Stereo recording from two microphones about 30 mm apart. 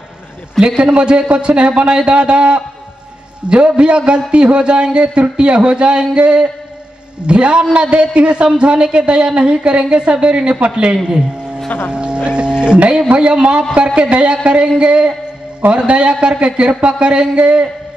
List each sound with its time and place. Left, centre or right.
0.6 s speech: right
11.9 s a sound: right
13.2 s speech: right